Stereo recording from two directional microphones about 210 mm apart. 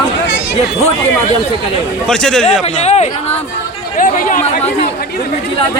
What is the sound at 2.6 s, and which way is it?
Speech, 30° left (ahead or behind).